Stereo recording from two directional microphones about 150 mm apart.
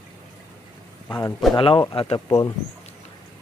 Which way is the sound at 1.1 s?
20° left (ahead or behind).